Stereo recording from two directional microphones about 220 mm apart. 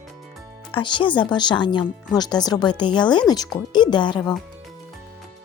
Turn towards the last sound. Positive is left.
turn(degrees=20)  # may be behind; listen again after turning